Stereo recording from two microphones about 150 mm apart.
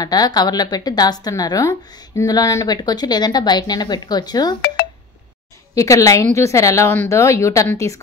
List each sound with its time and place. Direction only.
0.0 s a woman's voice: 25° left (ahead or behind)
5.8 s a woman's voice: 20° left (ahead or behind)